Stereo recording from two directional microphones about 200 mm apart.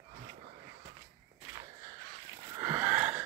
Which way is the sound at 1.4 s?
20° right (ahead or behind).